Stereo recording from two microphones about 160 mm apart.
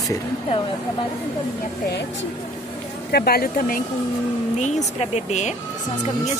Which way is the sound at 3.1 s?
75° left (ahead or behind).